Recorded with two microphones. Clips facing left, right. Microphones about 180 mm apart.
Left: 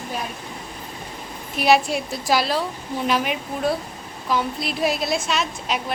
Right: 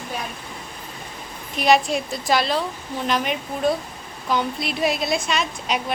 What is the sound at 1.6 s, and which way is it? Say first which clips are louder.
A woman's voice: even; 5° left (ahead or behind).